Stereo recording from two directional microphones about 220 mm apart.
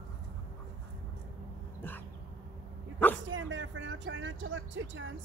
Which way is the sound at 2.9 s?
5° left (ahead or behind).